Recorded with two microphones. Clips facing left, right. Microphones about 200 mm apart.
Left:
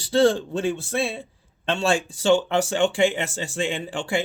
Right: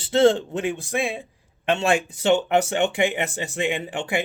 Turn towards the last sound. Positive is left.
turn(degrees=-20)  # may be behind; listen again after turning